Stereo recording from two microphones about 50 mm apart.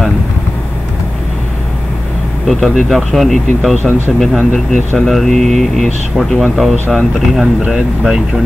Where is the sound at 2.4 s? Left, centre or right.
Centre.